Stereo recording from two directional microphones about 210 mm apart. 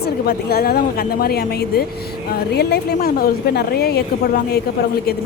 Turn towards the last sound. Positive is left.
turn(degrees=50)  # may be behind; listen again after turning